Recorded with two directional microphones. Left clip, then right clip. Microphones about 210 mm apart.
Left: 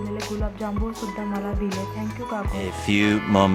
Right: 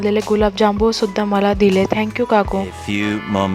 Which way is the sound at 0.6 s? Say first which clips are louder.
Right 15 dB; 50° right (ahead or behind).